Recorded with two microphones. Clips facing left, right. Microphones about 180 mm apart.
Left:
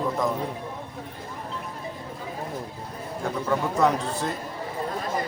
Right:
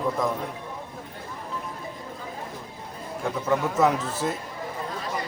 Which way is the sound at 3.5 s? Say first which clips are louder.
Right 1 dB; centre (ahead or behind).